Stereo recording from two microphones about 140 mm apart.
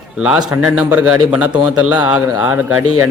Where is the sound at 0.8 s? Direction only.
10° right (ahead or behind).